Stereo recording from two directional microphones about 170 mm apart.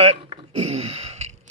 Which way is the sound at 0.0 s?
35° right (ahead or behind).